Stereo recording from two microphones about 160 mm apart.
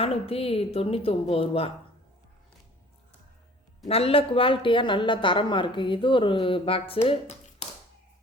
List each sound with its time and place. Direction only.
0.0 s speech: 35° left (ahead or behind)
3.8 s speech: 40° left (ahead or behind)